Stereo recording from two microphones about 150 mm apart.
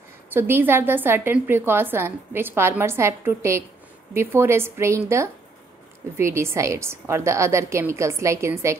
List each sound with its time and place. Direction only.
0.3 s a woman's voice: 15° right (ahead or behind)